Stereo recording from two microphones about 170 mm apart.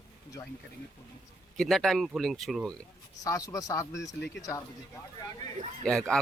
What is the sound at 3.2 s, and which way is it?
Speech, 20° left (ahead or behind).